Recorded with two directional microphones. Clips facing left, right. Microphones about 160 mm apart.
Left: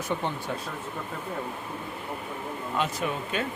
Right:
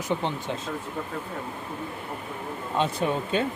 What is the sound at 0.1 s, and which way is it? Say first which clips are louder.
Speech: right 3 dB; 20° right (ahead or behind).